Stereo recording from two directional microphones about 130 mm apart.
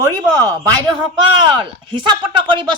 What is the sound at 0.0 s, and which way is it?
Speech, 25° right (ahead or behind).